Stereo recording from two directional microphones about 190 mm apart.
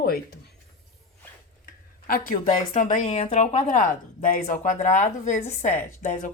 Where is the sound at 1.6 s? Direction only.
50° left (ahead or behind).